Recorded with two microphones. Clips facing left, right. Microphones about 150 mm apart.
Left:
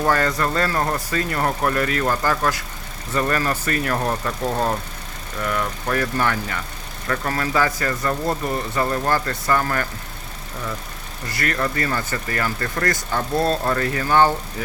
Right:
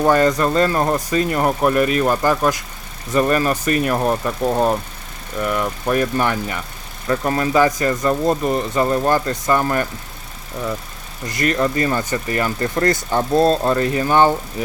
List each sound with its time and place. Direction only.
0.0 s speech: 20° right (ahead or behind)
11.3 s speech: 20° right (ahead or behind)